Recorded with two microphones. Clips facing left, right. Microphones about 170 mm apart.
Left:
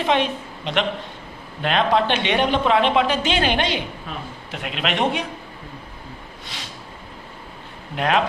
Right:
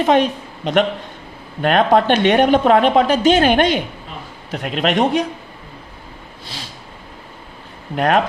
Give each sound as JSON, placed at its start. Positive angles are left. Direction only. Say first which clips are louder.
{"t": 0.0, "sound": "a woman's voice", "louder": "right 6 dB", "side_deg": -45}
{"t": 7.9, "sound": "a woman's voice", "louder": "right 5 dB", "side_deg": -45}